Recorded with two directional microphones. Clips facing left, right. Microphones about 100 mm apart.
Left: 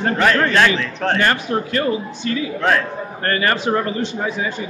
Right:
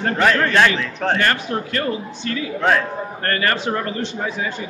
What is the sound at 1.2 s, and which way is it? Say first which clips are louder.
A man's voice: left 2 dB; 15° left (ahead or behind).